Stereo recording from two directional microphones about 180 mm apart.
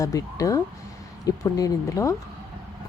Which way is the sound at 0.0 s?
20° left (ahead or behind).